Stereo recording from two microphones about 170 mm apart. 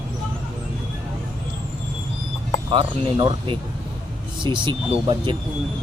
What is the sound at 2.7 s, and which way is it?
Speech, 30° right (ahead or behind).